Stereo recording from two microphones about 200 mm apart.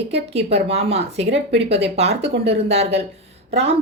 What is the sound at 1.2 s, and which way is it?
Speech, 60° right (ahead or behind).